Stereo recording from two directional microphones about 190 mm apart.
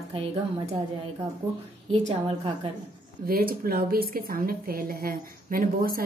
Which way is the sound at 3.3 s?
50° right (ahead or behind).